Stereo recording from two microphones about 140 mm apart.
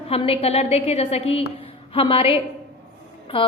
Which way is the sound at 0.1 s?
45° left (ahead or behind).